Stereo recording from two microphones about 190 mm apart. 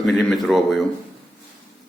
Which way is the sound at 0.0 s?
Centre (ahead or behind).